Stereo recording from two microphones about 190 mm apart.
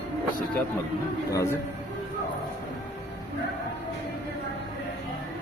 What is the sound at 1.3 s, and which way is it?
Speech, 15° left (ahead or behind).